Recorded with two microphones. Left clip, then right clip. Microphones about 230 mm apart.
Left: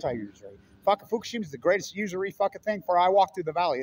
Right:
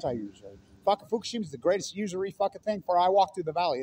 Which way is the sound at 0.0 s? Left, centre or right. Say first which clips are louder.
Left 1 dB; centre.